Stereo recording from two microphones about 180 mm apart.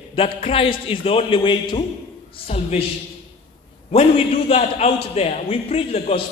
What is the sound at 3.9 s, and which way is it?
A man's voice, 35° left (ahead or behind).